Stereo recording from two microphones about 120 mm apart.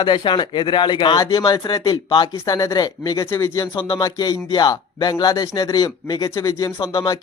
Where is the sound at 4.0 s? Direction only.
35° left (ahead or behind).